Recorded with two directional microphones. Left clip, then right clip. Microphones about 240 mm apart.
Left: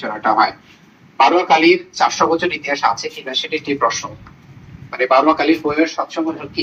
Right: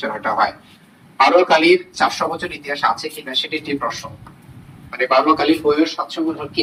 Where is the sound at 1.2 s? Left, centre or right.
Left.